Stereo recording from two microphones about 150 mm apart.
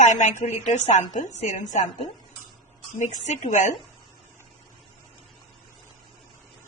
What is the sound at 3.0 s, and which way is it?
Speech, 50° left (ahead or behind).